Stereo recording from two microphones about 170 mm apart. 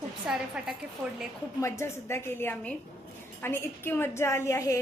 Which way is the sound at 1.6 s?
15° left (ahead or behind).